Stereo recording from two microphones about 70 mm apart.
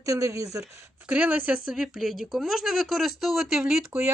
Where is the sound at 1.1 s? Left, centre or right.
Centre.